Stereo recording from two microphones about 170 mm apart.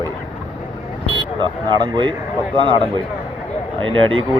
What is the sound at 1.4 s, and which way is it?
Speech, 25° right (ahead or behind).